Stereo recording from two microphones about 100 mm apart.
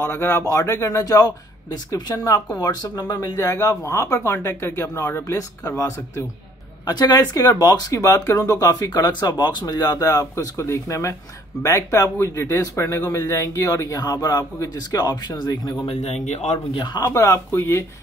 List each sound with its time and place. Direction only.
0.0 s speech: 30° left (ahead or behind)
6.9 s a woman's voice: 45° left (ahead or behind)
15.9 s a man's voice: 90° left
16.7 s a woman's voice: 45° left (ahead or behind)
17.1 s speech: 35° left (ahead or behind)